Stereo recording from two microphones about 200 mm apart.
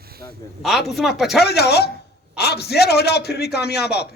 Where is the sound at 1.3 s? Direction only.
55° left (ahead or behind).